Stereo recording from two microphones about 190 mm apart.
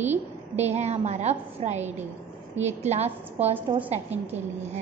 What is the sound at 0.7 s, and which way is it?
A woman's voice, 35° right (ahead or behind).